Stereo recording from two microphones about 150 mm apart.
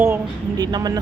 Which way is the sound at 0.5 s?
25° right (ahead or behind).